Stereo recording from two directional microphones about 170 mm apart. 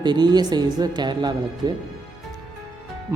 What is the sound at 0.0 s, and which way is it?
Speech, 25° right (ahead or behind).